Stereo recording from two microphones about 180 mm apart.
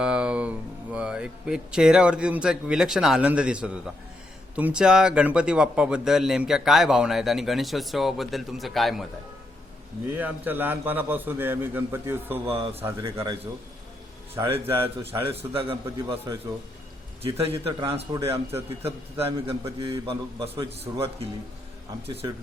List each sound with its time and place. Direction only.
0.0 s a man's voice: 5° right (ahead or behind)
10.2 s a man's voice: 10° right (ahead or behind)
12.5 s a man's voice: 30° right (ahead or behind)
12.8 s a man's voice: 20° right (ahead or behind)
14.3 s a man's voice: 15° right (ahead or behind)
15.5 s a man's voice: 30° right (ahead or behind)
17.2 s a man's voice: 35° right (ahead or behind)
18.1 s a man's voice: 15° right (ahead or behind)
19.2 s a man's voice: 35° right (ahead or behind)
22.0 s a man's voice: 35° right (ahead or behind)